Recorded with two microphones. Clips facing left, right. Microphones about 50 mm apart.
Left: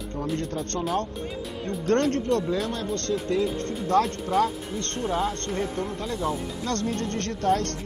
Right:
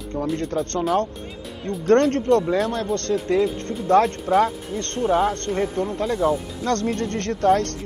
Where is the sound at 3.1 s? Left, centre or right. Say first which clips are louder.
Right 4 dB; right.